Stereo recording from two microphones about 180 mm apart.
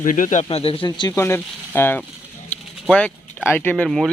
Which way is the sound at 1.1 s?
15° left (ahead or behind).